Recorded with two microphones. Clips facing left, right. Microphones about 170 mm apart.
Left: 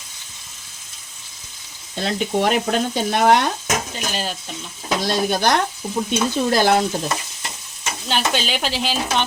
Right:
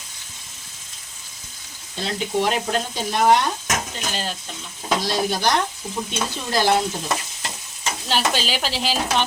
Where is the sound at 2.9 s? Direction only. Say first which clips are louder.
Left 1 dB; 65° left (ahead or behind).